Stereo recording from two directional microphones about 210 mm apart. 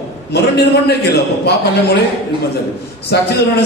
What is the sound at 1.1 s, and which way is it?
Speech, 50° left (ahead or behind).